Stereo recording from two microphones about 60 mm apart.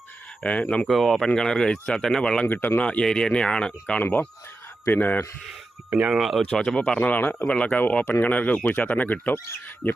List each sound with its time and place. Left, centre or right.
0.4 s speech: left
0.9 s speech: centre
2.5 s speech: left
2.8 s speech: centre
4.0 s speech: left
6.1 s speech: centre
6.4 s speech: centre; by 9.9 s left